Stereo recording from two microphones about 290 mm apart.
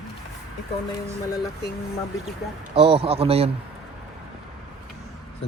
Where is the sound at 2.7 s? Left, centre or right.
Centre.